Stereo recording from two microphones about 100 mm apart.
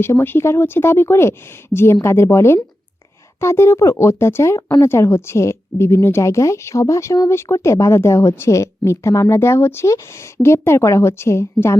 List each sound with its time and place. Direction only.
0.0 s speech: 25° left (ahead or behind)